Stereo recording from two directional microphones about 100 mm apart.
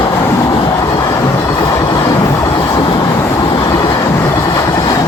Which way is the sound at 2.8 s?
45° left (ahead or behind).